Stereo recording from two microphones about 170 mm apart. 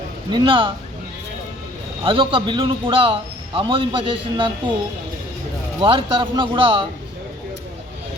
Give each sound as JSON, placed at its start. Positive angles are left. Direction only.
{"t": 0.3, "sound": "speech", "side_deg": -30}
{"t": 2.0, "sound": "speech", "side_deg": -30}
{"t": 5.8, "sound": "a man's voice", "side_deg": -30}